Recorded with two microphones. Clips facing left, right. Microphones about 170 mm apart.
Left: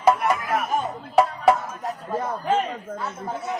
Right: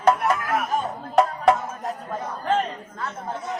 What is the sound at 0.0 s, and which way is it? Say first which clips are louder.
Music: even; centre (ahead or behind).